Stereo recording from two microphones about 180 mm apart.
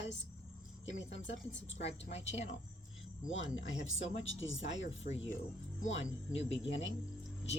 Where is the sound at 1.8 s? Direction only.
40° left (ahead or behind).